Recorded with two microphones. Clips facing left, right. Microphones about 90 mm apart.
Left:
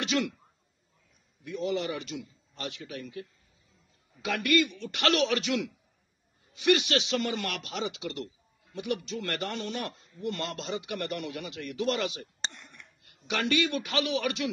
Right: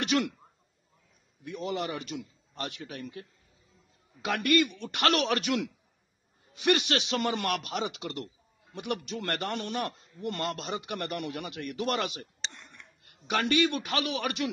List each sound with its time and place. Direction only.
0.0 s speech: 50° right (ahead or behind)
1.6 s a man's voice: 40° right (ahead or behind)
4.3 s a man's voice: 35° right (ahead or behind)
4.7 s speech: 50° right (ahead or behind)
13.1 s speech: 40° right (ahead or behind)